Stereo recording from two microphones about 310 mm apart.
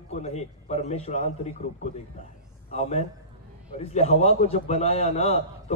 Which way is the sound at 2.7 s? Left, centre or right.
Left.